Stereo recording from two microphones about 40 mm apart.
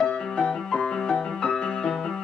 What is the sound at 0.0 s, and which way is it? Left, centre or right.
Music, centre.